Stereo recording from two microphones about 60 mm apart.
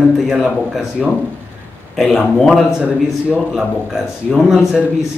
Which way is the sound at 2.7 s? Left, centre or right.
Centre.